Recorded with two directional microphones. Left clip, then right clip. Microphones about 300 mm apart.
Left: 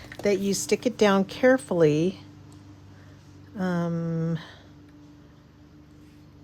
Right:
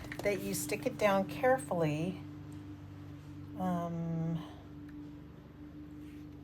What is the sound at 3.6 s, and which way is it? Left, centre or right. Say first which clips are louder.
Speech: left 7 dB; left.